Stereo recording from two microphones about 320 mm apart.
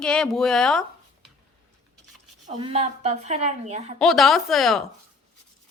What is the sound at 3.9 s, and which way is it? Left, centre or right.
Speech, centre.